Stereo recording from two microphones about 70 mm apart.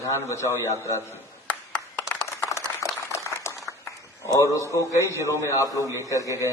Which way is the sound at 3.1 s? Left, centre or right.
Left.